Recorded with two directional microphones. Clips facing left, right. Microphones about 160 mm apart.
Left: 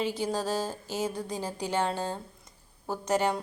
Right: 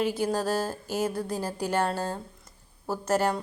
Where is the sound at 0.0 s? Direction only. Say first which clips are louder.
Right 3 dB; 10° right (ahead or behind).